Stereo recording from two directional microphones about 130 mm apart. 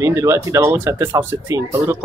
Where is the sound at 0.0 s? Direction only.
20° right (ahead or behind).